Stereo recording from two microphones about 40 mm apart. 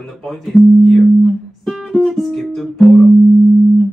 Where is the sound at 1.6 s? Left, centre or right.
Centre.